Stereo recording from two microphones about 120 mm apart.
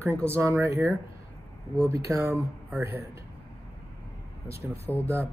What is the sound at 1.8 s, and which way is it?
Speech, 25° right (ahead or behind).